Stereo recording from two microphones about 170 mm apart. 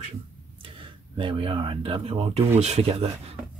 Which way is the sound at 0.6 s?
30° right (ahead or behind).